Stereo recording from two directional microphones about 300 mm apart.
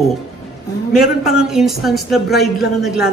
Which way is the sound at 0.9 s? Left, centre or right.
Centre.